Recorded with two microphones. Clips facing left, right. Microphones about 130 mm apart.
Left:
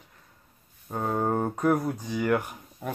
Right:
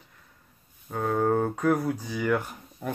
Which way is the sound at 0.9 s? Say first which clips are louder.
Right 2 dB; 10° left (ahead or behind).